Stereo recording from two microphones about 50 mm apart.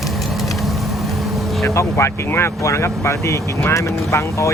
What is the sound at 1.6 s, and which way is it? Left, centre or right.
Speech, left.